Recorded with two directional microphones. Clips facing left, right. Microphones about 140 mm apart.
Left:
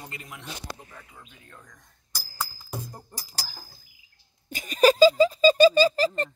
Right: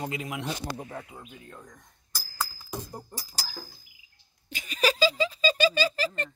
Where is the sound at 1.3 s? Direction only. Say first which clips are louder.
Right 5 dB; 25° right (ahead or behind).